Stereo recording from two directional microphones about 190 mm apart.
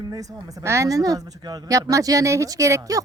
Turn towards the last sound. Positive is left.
turn(degrees=-20)  # may be behind; listen again after turning